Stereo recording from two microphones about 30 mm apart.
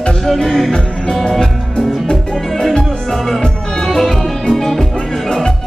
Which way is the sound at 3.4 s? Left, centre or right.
Centre.